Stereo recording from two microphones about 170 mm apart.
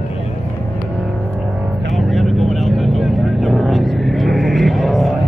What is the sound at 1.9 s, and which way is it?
Vehicle, centre (ahead or behind).